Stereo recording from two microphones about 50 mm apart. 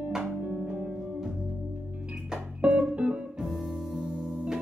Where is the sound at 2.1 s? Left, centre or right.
Centre.